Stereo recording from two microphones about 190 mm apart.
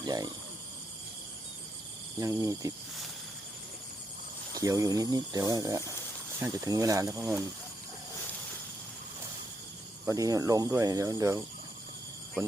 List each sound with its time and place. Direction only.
0.0 s a sound: 20° right (ahead or behind)
2.1 s speech: 15° right (ahead or behind)
4.5 s speech: 20° right (ahead or behind)
10.1 s speech: 15° right (ahead or behind)